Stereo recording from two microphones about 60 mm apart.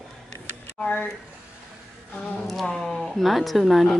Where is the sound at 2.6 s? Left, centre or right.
Centre.